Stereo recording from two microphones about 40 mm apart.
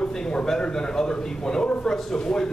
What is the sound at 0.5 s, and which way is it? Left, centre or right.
Speech, centre.